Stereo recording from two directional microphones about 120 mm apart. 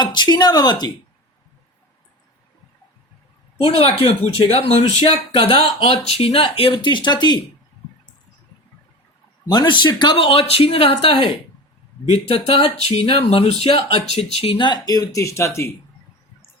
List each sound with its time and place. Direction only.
0.0 s speech: 35° left (ahead or behind)
3.8 s speech: 50° left (ahead or behind); by 7.4 s 35° left (ahead or behind)
9.5 s speech: 35° left (ahead or behind)